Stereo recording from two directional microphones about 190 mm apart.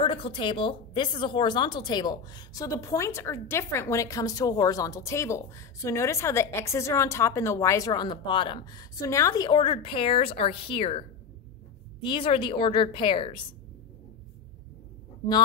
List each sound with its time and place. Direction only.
0.0 s a woman's voice: 25° left (ahead or behind)